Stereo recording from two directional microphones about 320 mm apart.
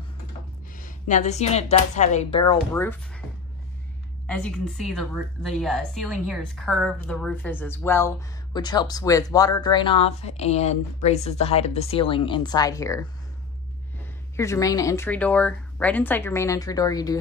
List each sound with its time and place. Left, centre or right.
0.7 s speech: left; by 3.2 s centre
4.3 s a woman's voice: centre
14.3 s a woman's voice: centre